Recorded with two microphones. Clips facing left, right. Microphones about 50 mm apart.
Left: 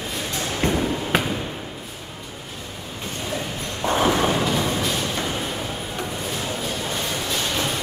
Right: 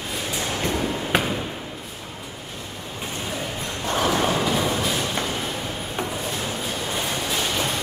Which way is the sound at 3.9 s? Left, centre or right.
Centre.